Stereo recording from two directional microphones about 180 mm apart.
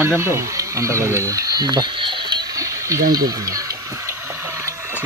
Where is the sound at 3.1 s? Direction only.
20° right (ahead or behind).